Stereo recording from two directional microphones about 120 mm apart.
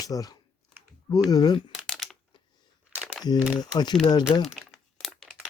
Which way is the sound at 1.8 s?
5° left (ahead or behind).